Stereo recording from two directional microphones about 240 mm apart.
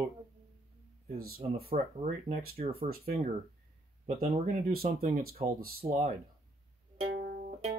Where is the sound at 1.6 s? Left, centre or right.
Right.